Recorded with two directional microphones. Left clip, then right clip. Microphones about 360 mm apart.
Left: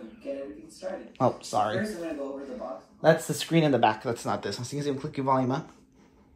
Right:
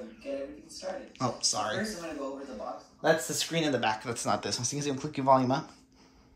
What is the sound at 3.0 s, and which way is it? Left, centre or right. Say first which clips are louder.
Speech: left 4 dB; centre.